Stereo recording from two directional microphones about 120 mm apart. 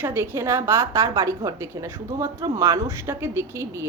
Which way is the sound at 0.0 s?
20° right (ahead or behind).